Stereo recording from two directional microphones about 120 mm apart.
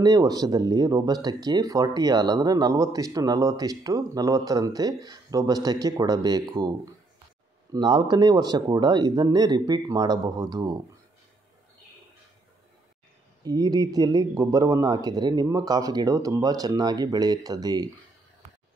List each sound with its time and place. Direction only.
0.0 s speech: 30° right (ahead or behind)
7.7 s speech: 35° right (ahead or behind)
13.4 s speech: 30° right (ahead or behind)